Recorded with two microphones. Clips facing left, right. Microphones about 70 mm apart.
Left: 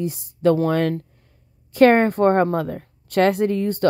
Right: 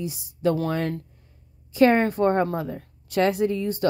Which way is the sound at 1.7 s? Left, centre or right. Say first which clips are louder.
Left 4 dB; left.